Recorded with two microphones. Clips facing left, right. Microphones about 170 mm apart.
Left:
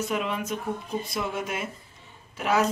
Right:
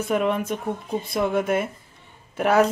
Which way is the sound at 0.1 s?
50° right (ahead or behind).